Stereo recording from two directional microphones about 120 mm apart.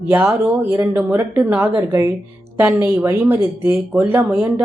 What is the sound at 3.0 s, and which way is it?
A woman's voice, 20° right (ahead or behind).